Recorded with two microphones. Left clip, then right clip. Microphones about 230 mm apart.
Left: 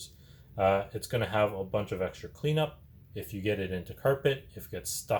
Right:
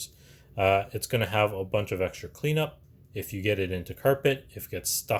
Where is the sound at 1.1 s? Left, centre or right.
Right.